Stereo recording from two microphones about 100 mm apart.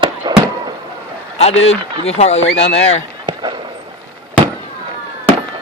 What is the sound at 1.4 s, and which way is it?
Speech, 90° left.